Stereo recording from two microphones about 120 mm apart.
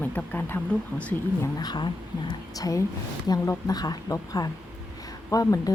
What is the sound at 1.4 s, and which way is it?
A woman's voice, 35° left (ahead or behind).